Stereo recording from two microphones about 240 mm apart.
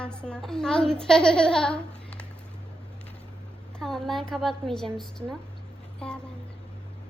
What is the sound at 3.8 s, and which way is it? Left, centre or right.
A child's voice, centre.